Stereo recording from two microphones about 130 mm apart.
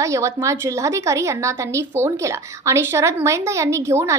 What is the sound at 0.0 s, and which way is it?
A woman's voice, 25° right (ahead or behind).